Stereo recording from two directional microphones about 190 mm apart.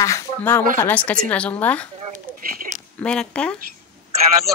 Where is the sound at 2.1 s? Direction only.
45° right (ahead or behind).